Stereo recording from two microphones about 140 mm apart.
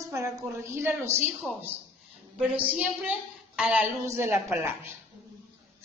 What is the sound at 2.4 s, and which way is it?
A woman's voice, 10° right (ahead or behind).